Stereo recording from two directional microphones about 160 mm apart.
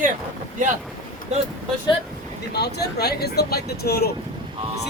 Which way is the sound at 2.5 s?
90° left.